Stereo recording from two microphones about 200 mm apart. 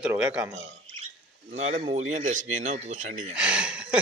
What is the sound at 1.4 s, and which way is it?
A man's voice, 35° right (ahead or behind).